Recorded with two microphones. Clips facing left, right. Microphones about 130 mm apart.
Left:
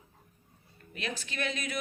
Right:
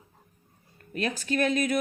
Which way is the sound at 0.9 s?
45° right (ahead or behind).